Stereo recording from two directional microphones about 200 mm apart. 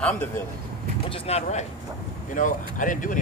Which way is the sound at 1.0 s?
30° left (ahead or behind).